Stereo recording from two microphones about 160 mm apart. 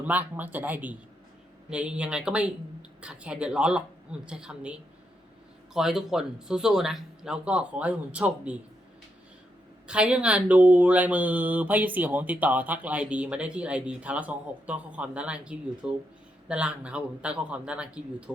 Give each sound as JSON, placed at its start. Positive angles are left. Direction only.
{"t": 0.0, "sound": "speech", "side_deg": -10}
{"t": 9.8, "sound": "speech", "side_deg": -5}